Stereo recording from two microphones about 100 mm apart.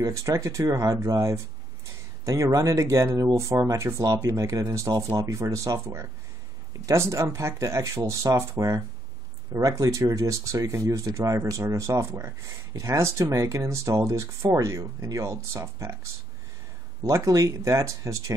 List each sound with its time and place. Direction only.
0.0 s speech: 35° right (ahead or behind)
17.0 s speech: 30° right (ahead or behind)